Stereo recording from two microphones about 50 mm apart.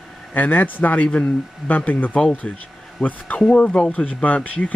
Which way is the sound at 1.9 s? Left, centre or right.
Left.